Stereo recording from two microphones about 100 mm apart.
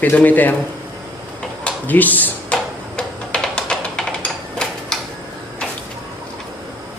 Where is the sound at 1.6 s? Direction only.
15° left (ahead or behind).